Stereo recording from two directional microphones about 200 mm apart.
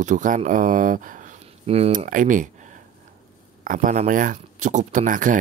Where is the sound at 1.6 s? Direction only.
30° right (ahead or behind).